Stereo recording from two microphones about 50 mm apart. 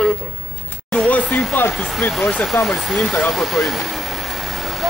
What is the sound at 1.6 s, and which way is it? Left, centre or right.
Speech, left.